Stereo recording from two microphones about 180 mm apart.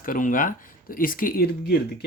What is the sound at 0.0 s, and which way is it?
Speech, 50° left (ahead or behind).